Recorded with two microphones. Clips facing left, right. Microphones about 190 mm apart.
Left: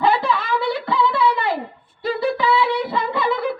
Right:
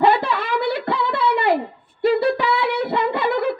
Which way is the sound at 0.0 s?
65° right (ahead or behind).